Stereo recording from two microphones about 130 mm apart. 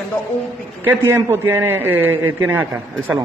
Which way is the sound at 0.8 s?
15° right (ahead or behind).